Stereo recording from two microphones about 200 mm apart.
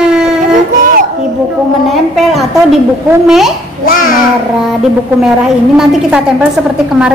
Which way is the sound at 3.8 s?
45° left (ahead or behind).